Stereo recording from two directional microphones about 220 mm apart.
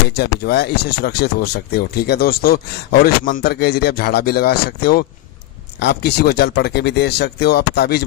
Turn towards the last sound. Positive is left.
turn(degrees=45)  # may be behind; listen again after turning